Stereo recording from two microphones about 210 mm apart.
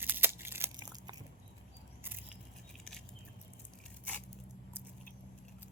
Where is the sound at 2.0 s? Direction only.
10° right (ahead or behind).